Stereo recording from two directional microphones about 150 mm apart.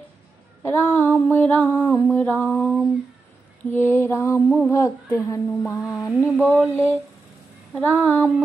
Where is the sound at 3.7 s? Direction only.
15° left (ahead or behind).